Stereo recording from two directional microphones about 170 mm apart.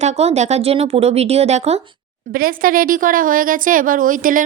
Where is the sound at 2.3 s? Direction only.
60° right (ahead or behind).